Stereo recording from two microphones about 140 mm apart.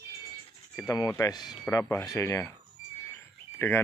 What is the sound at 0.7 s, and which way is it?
Speech, 25° left (ahead or behind).